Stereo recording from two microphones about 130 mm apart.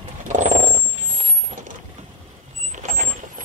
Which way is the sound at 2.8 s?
70° right (ahead or behind).